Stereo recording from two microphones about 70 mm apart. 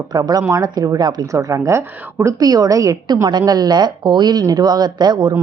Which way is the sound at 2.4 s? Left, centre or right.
Right.